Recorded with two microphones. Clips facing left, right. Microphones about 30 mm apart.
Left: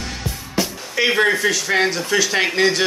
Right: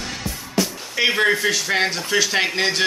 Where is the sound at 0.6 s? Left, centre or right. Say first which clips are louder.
Even; centre.